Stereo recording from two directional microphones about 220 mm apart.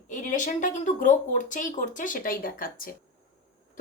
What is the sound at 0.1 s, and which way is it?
Speech, 35° left (ahead or behind).